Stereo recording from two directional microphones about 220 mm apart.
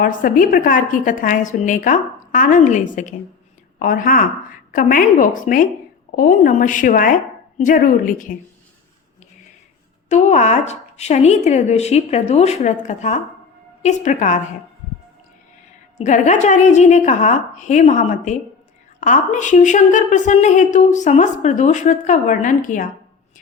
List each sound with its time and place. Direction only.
0.0 s a woman's voice: 40° left (ahead or behind)
10.1 s a woman's voice: 35° left (ahead or behind)
16.0 s a woman's voice: 35° left (ahead or behind)